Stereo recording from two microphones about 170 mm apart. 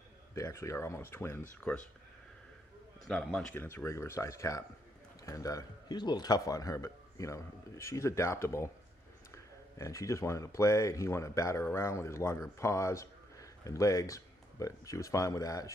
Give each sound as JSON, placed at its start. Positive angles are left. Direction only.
{"t": 0.3, "sound": "speech", "side_deg": 15}
{"t": 3.1, "sound": "a man's voice", "side_deg": 5}
{"t": 9.8, "sound": "speech", "side_deg": 20}